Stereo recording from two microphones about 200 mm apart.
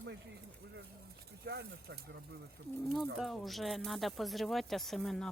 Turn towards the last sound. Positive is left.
turn(degrees=0)  # may be behind; listen again after turning